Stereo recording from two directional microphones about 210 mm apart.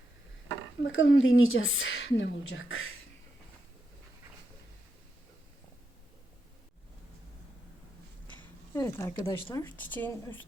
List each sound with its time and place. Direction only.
0.9 s a woman's voice: 65° left (ahead or behind)
8.7 s speech: 15° left (ahead or behind)